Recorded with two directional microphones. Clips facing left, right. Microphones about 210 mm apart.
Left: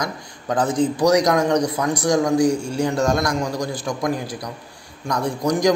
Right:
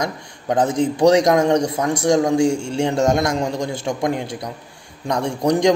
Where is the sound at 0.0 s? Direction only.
25° right (ahead or behind).